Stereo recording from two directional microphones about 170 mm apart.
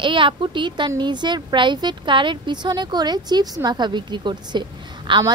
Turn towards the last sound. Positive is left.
turn(degrees=-25)  # may be behind; listen again after turning